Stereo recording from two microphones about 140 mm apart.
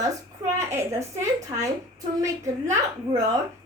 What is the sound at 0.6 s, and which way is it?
A woman's voice, 20° right (ahead or behind).